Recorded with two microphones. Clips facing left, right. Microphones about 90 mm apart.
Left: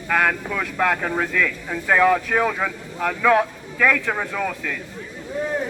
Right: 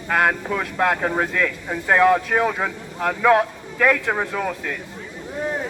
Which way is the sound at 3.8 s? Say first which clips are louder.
Right 1 dB; 25° right (ahead or behind).